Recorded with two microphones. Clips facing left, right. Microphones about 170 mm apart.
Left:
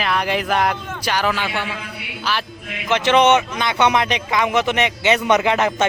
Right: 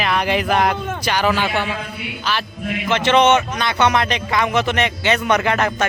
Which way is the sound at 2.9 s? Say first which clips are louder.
Even; 15° left (ahead or behind).